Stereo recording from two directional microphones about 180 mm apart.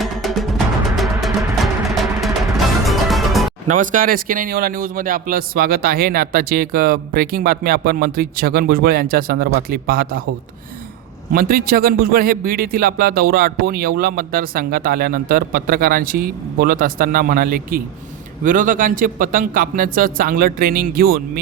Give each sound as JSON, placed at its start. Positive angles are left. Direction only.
{"t": 0.0, "sound": "music", "side_deg": 0}
{"t": 2.2, "sound": "music", "side_deg": 0}
{"t": 3.7, "sound": "a man's voice", "side_deg": -50}
{"t": 11.3, "sound": "a man's voice", "side_deg": -55}